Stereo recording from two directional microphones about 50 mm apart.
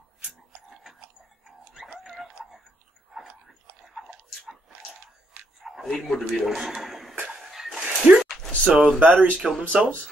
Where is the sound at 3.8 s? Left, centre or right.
Centre.